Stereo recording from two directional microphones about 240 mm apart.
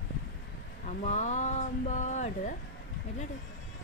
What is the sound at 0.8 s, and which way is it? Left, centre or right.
Speech, left.